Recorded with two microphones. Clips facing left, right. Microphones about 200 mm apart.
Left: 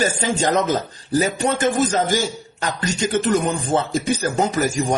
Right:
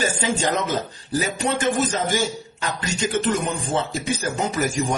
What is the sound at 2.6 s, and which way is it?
Speech, 40° left (ahead or behind).